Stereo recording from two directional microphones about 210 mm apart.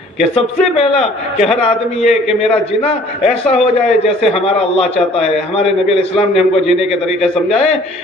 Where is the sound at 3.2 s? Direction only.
30° left (ahead or behind).